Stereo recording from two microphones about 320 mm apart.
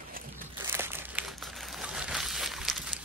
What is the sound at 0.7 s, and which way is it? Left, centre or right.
Crumpling, centre.